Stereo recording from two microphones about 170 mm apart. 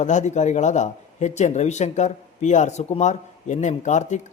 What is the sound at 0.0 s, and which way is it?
Speech, 45° left (ahead or behind).